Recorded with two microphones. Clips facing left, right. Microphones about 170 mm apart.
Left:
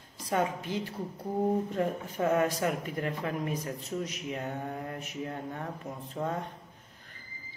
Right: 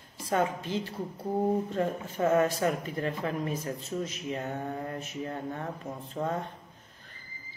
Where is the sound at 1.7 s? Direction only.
10° left (ahead or behind).